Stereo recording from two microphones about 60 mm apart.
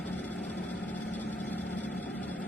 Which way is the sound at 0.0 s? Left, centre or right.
Left.